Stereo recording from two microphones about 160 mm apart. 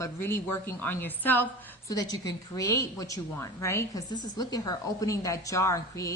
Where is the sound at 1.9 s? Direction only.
25° left (ahead or behind).